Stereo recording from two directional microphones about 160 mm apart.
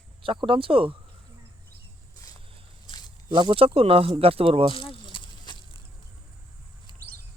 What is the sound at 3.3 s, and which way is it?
Speech, 30° right (ahead or behind).